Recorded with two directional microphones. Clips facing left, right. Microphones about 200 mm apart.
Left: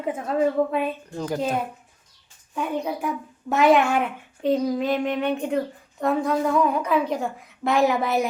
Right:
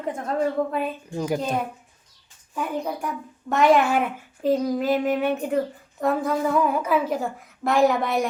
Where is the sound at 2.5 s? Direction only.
Centre (ahead or behind).